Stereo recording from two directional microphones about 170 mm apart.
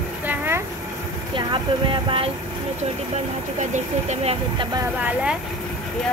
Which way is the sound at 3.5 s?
45° right (ahead or behind).